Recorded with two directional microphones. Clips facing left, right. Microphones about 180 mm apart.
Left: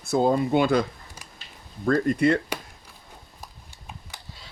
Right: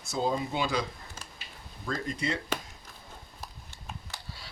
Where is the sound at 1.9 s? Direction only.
55° left (ahead or behind).